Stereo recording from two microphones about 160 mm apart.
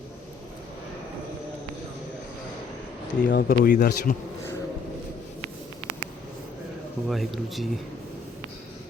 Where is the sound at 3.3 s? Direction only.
65° left (ahead or behind).